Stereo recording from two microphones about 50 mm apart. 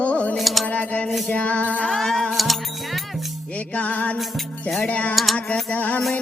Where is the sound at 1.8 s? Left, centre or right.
Centre.